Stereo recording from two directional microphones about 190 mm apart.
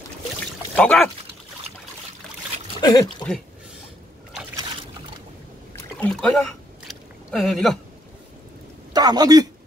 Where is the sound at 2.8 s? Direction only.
20° left (ahead or behind).